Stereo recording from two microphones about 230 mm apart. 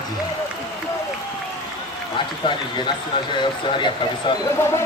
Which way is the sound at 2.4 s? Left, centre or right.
Centre.